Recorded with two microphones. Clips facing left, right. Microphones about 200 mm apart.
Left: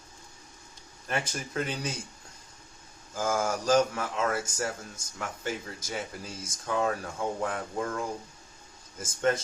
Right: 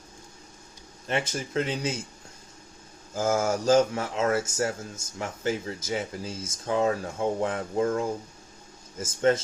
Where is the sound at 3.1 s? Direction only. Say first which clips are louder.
Right 4 dB; 45° right (ahead or behind).